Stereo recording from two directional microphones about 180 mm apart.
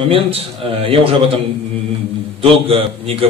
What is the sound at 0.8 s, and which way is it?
Speech, 30° right (ahead or behind).